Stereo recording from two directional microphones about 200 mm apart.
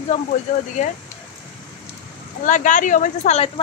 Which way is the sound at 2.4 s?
40° left (ahead or behind).